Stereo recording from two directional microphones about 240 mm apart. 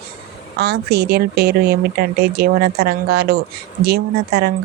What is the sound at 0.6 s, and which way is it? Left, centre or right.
A woman's voice, right.